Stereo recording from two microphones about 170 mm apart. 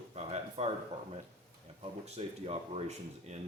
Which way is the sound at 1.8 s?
40° right (ahead or behind).